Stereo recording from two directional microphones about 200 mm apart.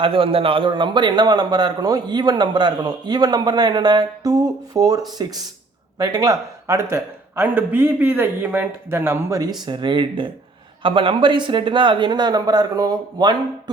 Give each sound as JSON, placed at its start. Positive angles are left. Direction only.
{"t": 0.0, "sound": "a man's voice", "side_deg": -25}